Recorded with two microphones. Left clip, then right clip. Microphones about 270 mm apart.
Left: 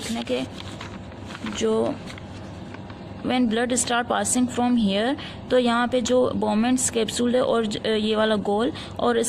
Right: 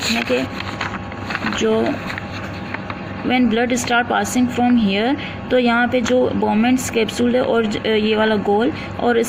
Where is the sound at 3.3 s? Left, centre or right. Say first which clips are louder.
Right 5 dB; left.